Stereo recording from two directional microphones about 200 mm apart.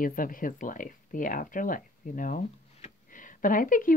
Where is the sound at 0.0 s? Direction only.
45° left (ahead or behind).